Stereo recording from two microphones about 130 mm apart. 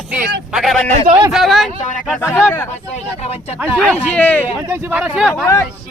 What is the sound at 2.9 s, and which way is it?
Speech, 55° left (ahead or behind).